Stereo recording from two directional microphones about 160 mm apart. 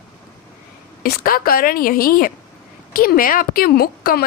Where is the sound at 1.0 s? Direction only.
65° left (ahead or behind).